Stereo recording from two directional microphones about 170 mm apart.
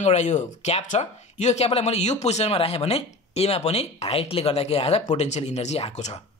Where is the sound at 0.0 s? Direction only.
40° left (ahead or behind).